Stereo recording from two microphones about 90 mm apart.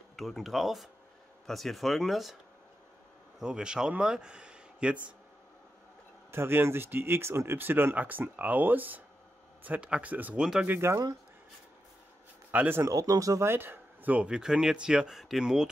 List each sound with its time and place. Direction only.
0.1 s speech: centre (ahead or behind)
3.3 s speech: 10° right (ahead or behind)
6.3 s speech: 25° right (ahead or behind)
10.4 s speech: 5° right (ahead or behind)
10.7 s speech: 30° right (ahead or behind)
12.4 s speech: 20° right (ahead or behind)
12.8 s speech: 40° right (ahead or behind); by 15.7 s 5° right (ahead or behind)